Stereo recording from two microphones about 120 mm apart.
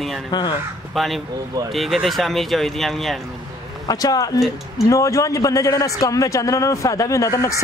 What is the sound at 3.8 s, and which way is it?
A man's voice, 30° left (ahead or behind).